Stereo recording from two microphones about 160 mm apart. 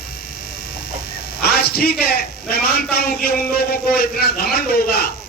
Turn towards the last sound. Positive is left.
turn(degrees=75)  # may be behind; listen again after turning